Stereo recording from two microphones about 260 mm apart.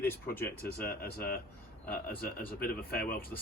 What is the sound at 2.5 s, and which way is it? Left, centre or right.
Speech, left.